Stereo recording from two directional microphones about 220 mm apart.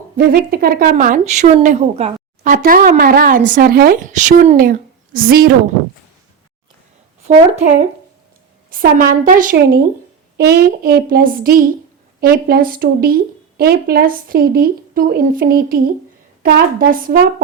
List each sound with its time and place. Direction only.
0.2 s speech: 40° right (ahead or behind)
7.2 s speech: 30° right (ahead or behind)
8.7 s speech: 40° right (ahead or behind)